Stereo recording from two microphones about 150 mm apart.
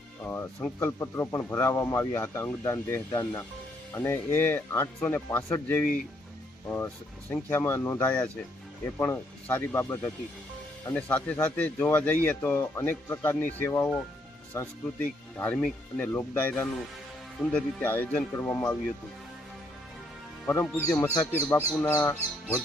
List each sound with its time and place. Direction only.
0.3 s speech: 15° left (ahead or behind)
20.5 s speech: 15° left (ahead or behind)